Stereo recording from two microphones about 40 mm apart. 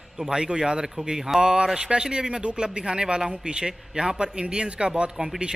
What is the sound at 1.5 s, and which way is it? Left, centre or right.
A man's voice, right.